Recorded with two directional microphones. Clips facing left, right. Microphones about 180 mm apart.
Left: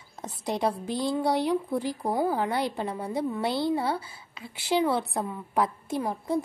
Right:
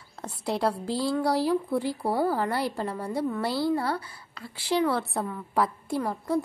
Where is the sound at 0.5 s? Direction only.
15° left (ahead or behind).